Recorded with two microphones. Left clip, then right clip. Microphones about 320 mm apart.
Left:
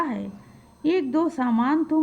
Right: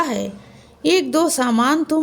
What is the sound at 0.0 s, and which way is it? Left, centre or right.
A woman's voice, left.